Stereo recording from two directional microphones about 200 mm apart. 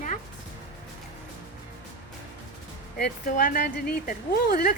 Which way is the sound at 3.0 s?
40° left (ahead or behind).